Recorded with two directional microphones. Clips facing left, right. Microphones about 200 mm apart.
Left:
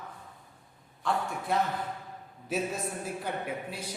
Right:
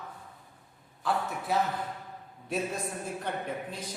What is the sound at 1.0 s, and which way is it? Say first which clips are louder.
A man's voice: even; 5° right (ahead or behind).